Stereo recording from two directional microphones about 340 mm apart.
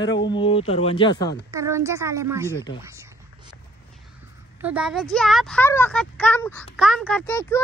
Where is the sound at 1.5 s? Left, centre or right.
Centre.